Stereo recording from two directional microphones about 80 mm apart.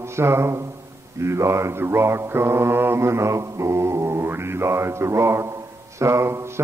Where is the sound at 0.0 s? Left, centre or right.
Right.